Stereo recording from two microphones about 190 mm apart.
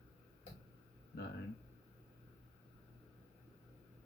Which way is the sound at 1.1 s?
60° left (ahead or behind).